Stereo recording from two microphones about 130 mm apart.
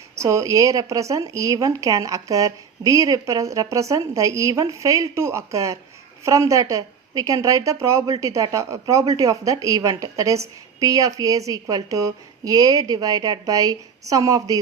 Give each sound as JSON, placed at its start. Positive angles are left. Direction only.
{"t": 0.2, "sound": "speech", "side_deg": -25}